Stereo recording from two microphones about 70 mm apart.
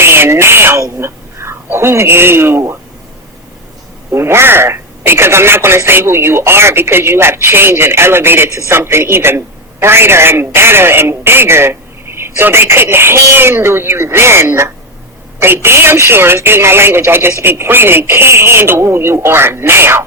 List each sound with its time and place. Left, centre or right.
0.0 s speech: right
4.1 s speech: right